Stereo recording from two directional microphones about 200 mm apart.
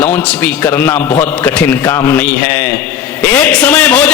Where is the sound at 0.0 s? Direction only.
10° left (ahead or behind).